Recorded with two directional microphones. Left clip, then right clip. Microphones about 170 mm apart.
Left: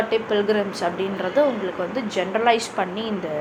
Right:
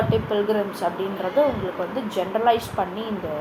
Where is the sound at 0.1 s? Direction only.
25° left (ahead or behind).